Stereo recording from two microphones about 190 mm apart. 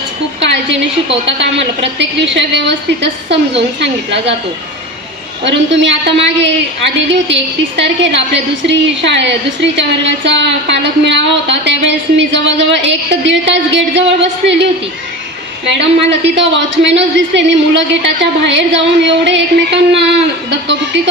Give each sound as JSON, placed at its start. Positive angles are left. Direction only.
{"t": 0.4, "sound": "a sound", "side_deg": -70}
{"t": 1.2, "sound": "a woman's voice", "side_deg": -70}
{"t": 5.4, "sound": "a woman's voice", "side_deg": -70}